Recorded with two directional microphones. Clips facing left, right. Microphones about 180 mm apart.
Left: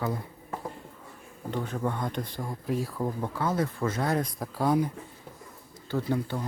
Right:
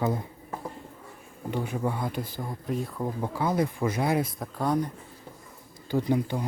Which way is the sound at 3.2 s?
15° right (ahead or behind).